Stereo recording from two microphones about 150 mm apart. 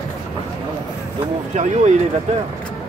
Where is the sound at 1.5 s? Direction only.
50° right (ahead or behind).